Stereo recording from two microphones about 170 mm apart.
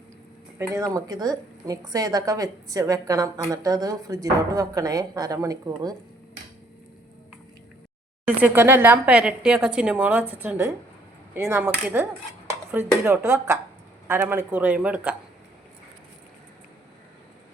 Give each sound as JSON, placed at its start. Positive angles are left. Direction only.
{"t": 0.6, "sound": "a woman's voice", "side_deg": -20}
{"t": 8.4, "sound": "a woman's voice", "side_deg": -10}